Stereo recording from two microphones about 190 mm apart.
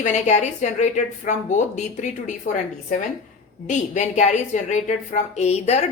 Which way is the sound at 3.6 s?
40° left (ahead or behind).